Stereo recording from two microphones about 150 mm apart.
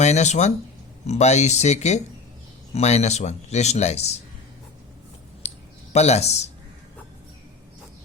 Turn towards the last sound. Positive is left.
turn(degrees=45)  # may be behind; listen again after turning